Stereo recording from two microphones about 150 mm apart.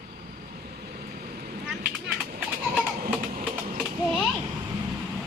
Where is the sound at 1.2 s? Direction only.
75° right (ahead or behind).